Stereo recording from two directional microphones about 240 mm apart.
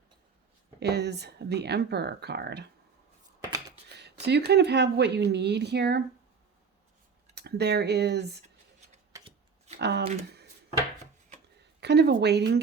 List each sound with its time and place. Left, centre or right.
0.8 s speech: right
3.9 s speech: right
7.3 s speech: right
9.1 s shuffling cards: right
9.7 s speech: right
10.0 s speech: right
11.8 s speech: right